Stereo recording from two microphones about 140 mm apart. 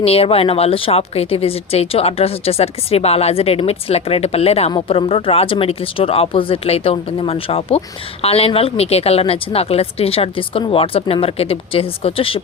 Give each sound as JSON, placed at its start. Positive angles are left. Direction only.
{"t": 0.0, "sound": "a woman's voice", "side_deg": 45}